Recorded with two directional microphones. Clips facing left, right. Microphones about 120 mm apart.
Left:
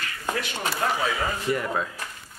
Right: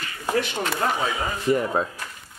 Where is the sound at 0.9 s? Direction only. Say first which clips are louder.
Even; 20° right (ahead or behind).